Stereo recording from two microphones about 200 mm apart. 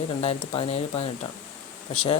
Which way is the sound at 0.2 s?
30° left (ahead or behind).